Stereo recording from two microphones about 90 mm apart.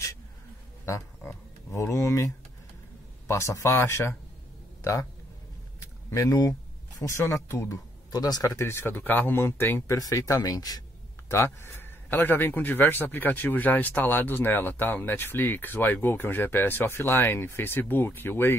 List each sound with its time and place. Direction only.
0.8 s a man's voice: 30° left (ahead or behind)
6.0 s speech: 40° left (ahead or behind)
8.1 s speech: 45° left (ahead or behind)
8.5 s a man's voice: 30° left (ahead or behind)
9.9 s speech: 40° left (ahead or behind)
11.2 s a man's voice: 30° left (ahead or behind)